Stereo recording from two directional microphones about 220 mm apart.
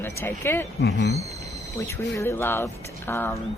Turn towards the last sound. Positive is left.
turn(degrees=10)  # may be behind; listen again after turning